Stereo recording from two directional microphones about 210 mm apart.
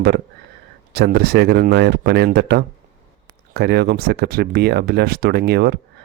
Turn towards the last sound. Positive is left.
turn(degrees=-50)  # may be behind; listen again after turning